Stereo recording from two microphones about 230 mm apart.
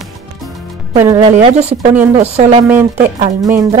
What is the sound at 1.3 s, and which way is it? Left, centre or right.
A woman's voice, right.